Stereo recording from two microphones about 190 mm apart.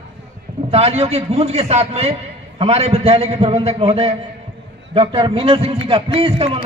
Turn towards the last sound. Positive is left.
turn(degrees=-30)  # may be behind; listen again after turning